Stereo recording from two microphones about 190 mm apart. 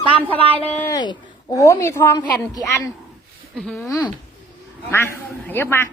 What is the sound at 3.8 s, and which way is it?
A woman's voice, 15° left (ahead or behind).